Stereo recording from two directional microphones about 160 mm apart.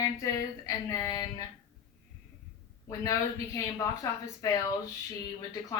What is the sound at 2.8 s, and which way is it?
A woman's voice, 20° left (ahead or behind).